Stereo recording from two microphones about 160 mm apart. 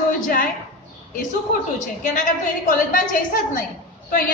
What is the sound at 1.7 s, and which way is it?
A woman's voice, 55° left (ahead or behind).